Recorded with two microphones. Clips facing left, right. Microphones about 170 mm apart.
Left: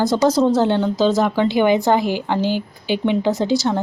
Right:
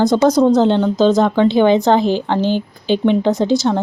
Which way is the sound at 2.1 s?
10° left (ahead or behind).